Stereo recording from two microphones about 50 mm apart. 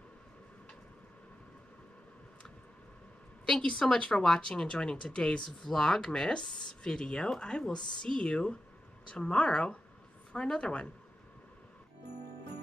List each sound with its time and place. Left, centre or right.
3.8 s a woman's voice: centre